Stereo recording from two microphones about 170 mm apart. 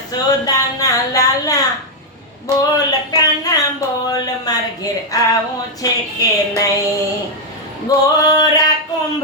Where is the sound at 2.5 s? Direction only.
20° right (ahead or behind).